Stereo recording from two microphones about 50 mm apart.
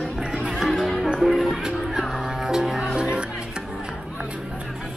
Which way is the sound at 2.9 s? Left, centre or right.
Right.